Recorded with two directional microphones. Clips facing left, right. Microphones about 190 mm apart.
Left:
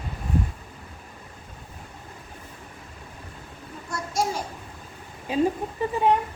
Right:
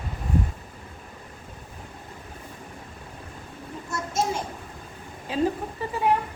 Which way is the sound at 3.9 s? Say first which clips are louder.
Even; 25° right (ahead or behind).